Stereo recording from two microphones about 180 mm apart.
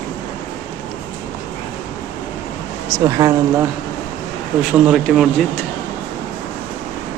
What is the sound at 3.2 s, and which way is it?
Speech, 25° right (ahead or behind).